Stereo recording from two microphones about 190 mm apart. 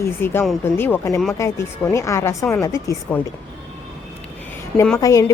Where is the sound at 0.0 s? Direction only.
10° left (ahead or behind).